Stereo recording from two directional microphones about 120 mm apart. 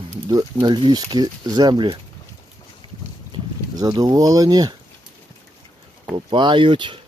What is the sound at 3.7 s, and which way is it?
Speech, 35° right (ahead or behind).